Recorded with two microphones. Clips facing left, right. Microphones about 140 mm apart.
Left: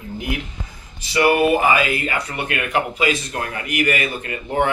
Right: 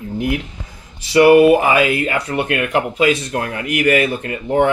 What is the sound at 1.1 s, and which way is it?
Speech, 70° right (ahead or behind).